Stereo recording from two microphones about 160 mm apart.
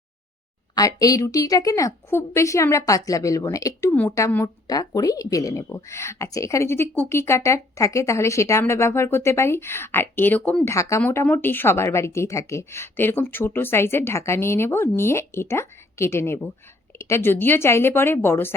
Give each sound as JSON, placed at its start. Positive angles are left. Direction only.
{"t": 0.8, "sound": "a woman's voice", "side_deg": 20}